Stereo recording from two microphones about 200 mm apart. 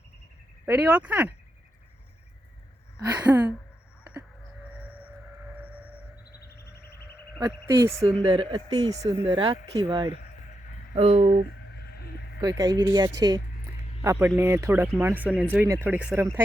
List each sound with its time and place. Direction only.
0.6 s speech: 5° right (ahead or behind)
3.2 s speech: 10° right (ahead or behind)
7.3 s speech: 20° right (ahead or behind)
11.7 s a sound: 50° left (ahead or behind)
12.4 s speech: 15° right (ahead or behind)